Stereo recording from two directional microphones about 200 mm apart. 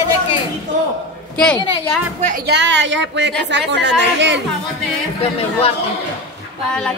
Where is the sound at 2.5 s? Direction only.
65° right (ahead or behind).